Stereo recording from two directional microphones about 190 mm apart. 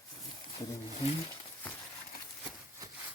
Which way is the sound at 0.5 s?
35° left (ahead or behind).